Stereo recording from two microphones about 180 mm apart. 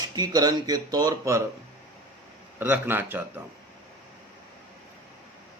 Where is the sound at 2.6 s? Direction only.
10° right (ahead or behind).